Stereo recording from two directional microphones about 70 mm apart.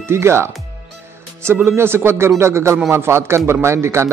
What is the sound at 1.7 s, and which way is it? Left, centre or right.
Speech, right.